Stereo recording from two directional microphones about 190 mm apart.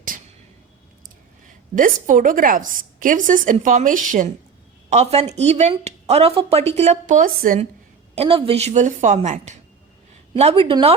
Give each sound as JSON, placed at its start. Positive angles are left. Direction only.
{"t": 1.7, "sound": "a woman's voice", "side_deg": -45}
{"t": 8.1, "sound": "speech", "side_deg": -30}